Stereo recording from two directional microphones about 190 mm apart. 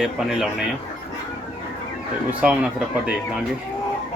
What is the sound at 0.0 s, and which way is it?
Speech, 5° right (ahead or behind).